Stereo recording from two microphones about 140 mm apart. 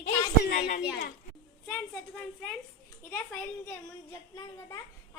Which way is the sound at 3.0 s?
10° left (ahead or behind).